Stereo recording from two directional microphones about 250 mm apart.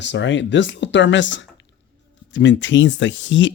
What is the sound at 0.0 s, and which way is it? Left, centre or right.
Speech, left.